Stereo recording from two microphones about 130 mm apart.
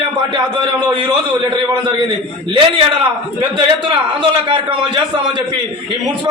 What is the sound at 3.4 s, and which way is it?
A man's voice, 40° right (ahead or behind).